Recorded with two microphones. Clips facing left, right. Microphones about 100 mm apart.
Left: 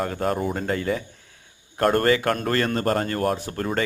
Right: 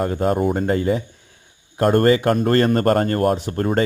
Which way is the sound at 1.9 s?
30° right (ahead or behind).